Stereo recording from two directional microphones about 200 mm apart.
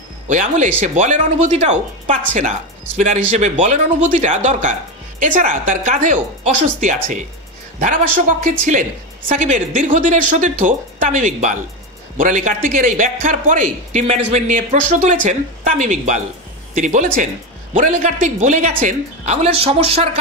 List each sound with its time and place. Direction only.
0.3 s a man's voice: 40° right (ahead or behind)